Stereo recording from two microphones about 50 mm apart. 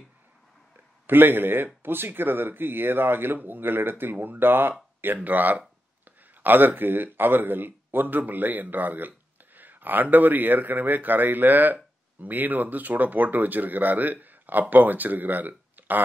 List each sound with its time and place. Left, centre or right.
1.0 s speech: right